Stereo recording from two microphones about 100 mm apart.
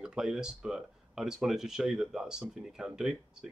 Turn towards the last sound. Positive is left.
turn(degrees=-5)  # may be behind; listen again after turning